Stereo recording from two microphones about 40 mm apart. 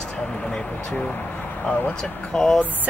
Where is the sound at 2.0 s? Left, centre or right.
Centre.